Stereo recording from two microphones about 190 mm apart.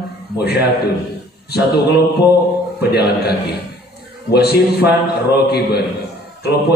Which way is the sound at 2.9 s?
55° left (ahead or behind).